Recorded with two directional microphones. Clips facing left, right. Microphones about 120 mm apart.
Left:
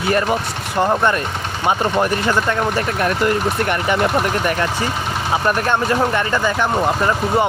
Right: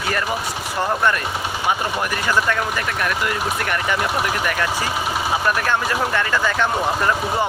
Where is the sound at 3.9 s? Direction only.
Centre (ahead or behind).